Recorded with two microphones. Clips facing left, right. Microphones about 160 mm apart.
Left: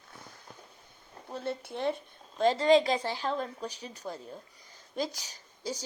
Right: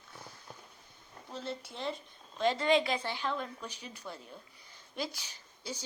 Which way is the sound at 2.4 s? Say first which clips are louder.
Left 5 dB; 35° left (ahead or behind).